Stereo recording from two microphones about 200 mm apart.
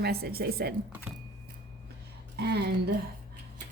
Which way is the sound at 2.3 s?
55° right (ahead or behind).